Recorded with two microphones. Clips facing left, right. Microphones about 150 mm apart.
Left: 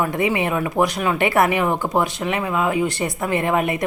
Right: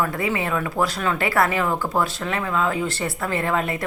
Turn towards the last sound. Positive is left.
turn(degrees=20)  # may be behind; listen again after turning